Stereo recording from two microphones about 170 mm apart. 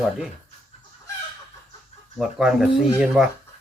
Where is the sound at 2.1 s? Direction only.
Centre (ahead or behind).